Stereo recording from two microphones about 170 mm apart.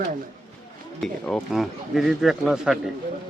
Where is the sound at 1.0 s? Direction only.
Centre (ahead or behind).